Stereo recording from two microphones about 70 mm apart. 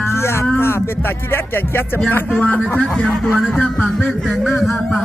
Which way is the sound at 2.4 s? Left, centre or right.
Centre.